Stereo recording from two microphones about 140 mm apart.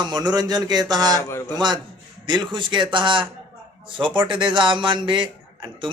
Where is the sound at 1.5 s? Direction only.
30° right (ahead or behind).